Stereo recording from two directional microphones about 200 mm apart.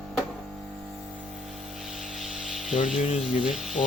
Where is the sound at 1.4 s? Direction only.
Centre (ahead or behind).